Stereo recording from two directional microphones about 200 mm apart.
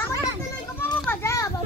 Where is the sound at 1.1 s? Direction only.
15° left (ahead or behind).